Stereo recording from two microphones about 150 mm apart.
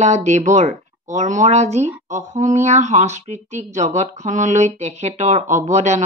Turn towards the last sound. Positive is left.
turn(degrees=-50)  # may be behind; listen again after turning